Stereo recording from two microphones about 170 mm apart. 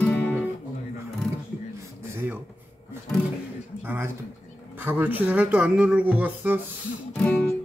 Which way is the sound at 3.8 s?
15° right (ahead or behind).